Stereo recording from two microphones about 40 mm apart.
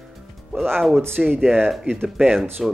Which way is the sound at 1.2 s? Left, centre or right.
Centre.